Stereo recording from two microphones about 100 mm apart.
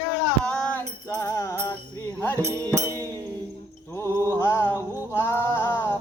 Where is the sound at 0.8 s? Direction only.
30° left (ahead or behind).